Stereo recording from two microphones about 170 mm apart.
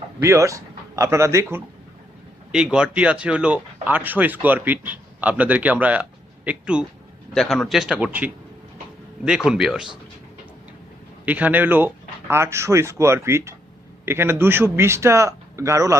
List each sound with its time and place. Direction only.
0.2 s speech: 15° right (ahead or behind)
2.5 s a man's voice: 5° right (ahead or behind)
11.3 s speech: 10° right (ahead or behind)